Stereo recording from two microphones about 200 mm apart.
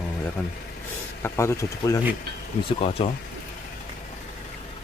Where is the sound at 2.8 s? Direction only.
30° left (ahead or behind).